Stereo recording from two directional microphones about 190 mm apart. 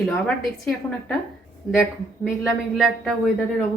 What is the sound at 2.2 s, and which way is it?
Speech, 5° right (ahead or behind).